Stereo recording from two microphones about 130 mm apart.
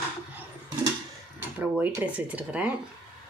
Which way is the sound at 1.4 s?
15° right (ahead or behind).